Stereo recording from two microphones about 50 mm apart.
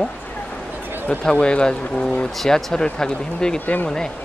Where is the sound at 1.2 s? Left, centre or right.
Centre.